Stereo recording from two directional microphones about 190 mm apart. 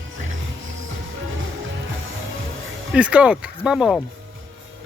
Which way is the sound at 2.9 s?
5° right (ahead or behind).